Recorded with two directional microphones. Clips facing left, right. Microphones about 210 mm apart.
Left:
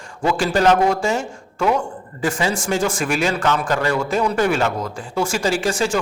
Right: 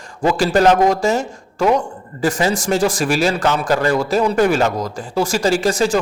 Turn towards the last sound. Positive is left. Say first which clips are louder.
# right 4 dB
turn(degrees=-40)  # may be behind; listen again after turning